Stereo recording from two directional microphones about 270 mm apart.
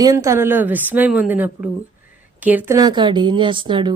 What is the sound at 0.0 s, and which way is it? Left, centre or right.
Speech, centre.